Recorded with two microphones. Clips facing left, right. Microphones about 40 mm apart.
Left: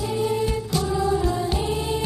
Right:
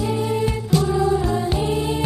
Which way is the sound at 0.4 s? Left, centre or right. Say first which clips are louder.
Right 4 dB; right.